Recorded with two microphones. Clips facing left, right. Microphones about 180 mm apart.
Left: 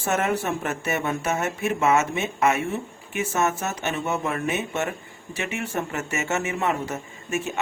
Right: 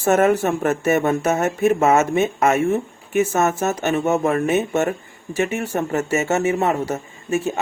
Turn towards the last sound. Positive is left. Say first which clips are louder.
# right 6 dB
turn(degrees=-35)  # may be behind; listen again after turning